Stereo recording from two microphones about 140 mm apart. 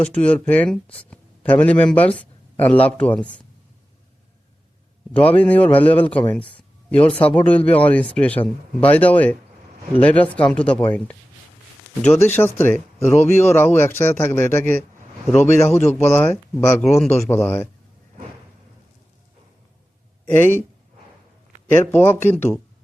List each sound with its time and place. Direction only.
0.0 s speech: 10° left (ahead or behind)
5.2 s speech: 10° left (ahead or behind)
12.2 s a man's voice: 15° left (ahead or behind)
20.4 s speech: 15° left (ahead or behind)
21.7 s speech: 15° left (ahead or behind)